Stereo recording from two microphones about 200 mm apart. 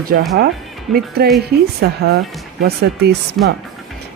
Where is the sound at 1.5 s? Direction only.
55° right (ahead or behind).